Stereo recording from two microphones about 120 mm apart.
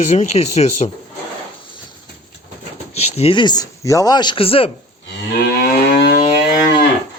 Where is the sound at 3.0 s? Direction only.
55° left (ahead or behind).